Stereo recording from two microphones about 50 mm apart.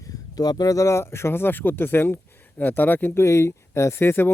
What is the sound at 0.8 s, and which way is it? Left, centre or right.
Speech, left.